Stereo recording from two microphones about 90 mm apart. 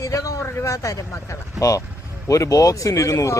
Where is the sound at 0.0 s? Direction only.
40° left (ahead or behind).